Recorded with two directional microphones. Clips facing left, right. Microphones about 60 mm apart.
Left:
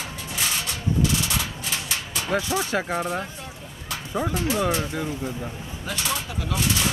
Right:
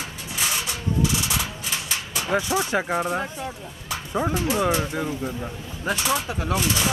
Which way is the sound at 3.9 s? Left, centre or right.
Centre.